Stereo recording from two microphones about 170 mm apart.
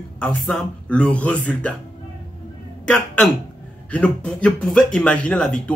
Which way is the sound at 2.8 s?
5° left (ahead or behind).